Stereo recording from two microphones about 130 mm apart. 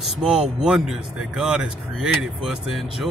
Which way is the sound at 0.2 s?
5° right (ahead or behind).